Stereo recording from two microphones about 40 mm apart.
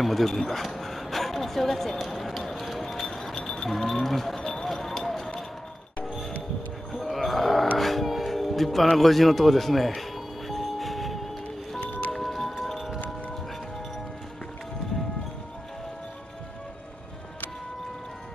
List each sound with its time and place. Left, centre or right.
0.0 s a sound: centre
2.0 s music: centre
3.8 s speech: centre
4.4 s run: centre
4.6 s a sound: centre
6.9 s music: centre